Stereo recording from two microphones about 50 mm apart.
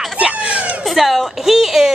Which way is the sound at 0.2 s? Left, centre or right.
Centre.